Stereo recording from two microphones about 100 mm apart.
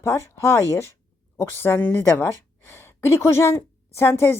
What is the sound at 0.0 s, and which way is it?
A woman's voice, 30° left (ahead or behind).